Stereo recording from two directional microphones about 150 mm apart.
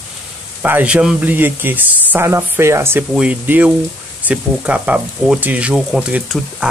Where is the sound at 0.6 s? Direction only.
10° right (ahead or behind).